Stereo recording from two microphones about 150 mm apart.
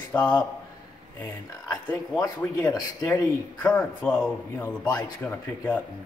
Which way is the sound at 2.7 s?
15° left (ahead or behind).